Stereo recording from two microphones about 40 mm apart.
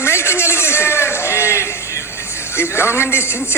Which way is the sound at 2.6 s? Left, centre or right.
Left.